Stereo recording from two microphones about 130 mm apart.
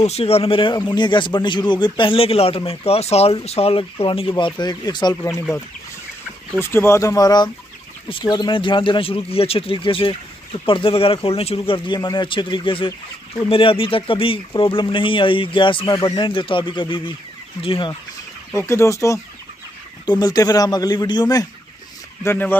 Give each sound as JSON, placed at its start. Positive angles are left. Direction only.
{"t": 0.0, "sound": "speech", "side_deg": 50}
{"t": 6.6, "sound": "speech", "side_deg": 20}
{"t": 16.3, "sound": "speech", "side_deg": 40}
{"t": 18.5, "sound": "speech", "side_deg": 20}
{"t": 22.2, "sound": "speech", "side_deg": 15}